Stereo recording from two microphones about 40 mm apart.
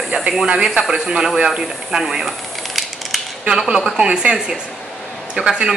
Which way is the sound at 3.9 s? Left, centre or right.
Right.